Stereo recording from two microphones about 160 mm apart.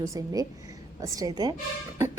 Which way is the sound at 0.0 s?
20° right (ahead or behind).